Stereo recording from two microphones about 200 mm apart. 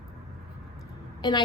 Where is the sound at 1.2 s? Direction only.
20° left (ahead or behind).